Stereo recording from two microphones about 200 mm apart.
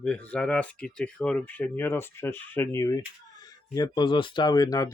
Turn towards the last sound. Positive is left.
turn(degrees=20)  # may be behind; listen again after turning